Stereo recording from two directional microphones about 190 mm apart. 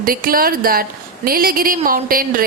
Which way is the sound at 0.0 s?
50° right (ahead or behind).